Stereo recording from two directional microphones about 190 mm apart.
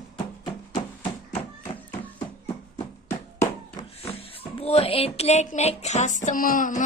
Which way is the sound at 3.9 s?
30° left (ahead or behind).